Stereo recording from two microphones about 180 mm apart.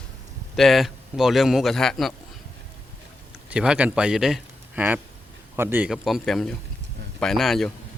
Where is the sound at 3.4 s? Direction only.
5° right (ahead or behind).